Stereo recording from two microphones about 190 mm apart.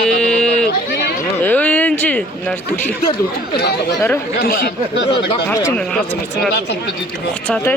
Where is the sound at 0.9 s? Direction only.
55° left (ahead or behind).